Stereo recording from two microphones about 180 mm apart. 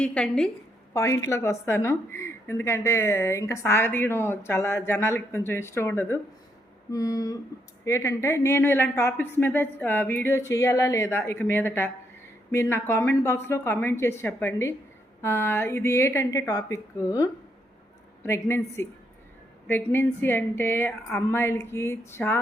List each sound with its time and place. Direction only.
0.0 s a woman's voice: 5° left (ahead or behind)
0.9 s a woman's voice: 15° left (ahead or behind)
6.9 s a sound: 20° left (ahead or behind)
7.9 s a woman's voice: 15° left (ahead or behind)